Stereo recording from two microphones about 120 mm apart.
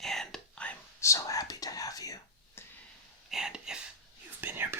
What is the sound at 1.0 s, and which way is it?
Speech, 25° left (ahead or behind).